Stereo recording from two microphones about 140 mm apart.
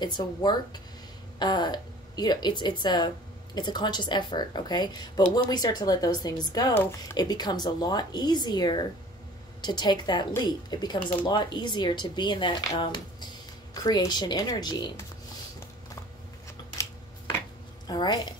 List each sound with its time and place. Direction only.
0.0 s a woman's voice: 30° left (ahead or behind)
7.2 s speech: 30° left (ahead or behind)
17.8 s speech: 30° left (ahead or behind)